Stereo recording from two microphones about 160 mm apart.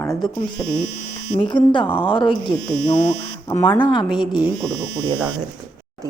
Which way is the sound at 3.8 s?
30° left (ahead or behind).